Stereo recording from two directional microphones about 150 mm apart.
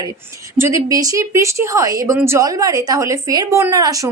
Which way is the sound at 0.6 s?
20° right (ahead or behind).